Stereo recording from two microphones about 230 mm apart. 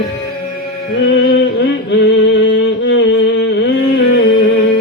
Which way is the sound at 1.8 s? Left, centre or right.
Left.